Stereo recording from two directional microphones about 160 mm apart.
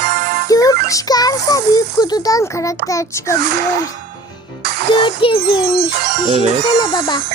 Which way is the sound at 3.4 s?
80° right.